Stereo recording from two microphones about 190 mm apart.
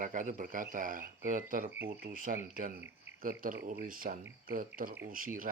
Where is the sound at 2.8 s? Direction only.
10° right (ahead or behind).